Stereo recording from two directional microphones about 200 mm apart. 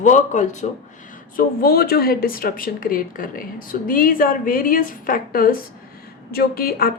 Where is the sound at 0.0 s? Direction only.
40° left (ahead or behind).